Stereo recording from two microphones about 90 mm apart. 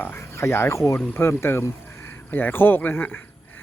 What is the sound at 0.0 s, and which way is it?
Speech, 25° left (ahead or behind).